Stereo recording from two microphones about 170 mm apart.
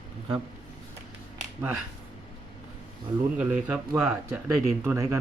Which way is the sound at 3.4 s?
10° right (ahead or behind).